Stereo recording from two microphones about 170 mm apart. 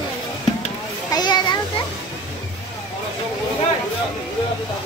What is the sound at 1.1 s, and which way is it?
Children playing, 25° left (ahead or behind).